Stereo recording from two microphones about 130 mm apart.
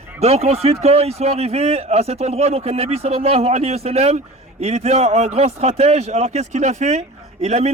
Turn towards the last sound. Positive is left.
turn(degrees=-55)  # may be behind; listen again after turning